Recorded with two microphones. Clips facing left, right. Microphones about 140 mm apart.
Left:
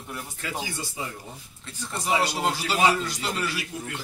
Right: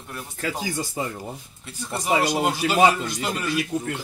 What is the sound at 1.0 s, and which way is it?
Speech, 55° right (ahead or behind).